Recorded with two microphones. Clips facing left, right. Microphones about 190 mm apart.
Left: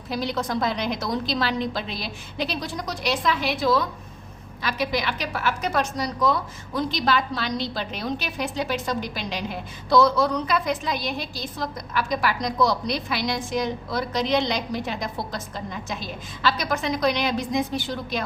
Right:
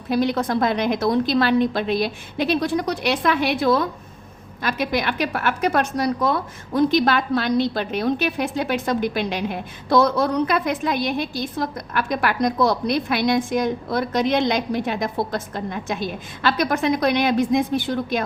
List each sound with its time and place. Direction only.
0.1 s a woman's voice: 55° right (ahead or behind)